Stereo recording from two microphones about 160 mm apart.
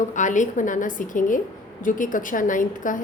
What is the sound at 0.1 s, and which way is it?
A woman's voice, 50° left (ahead or behind).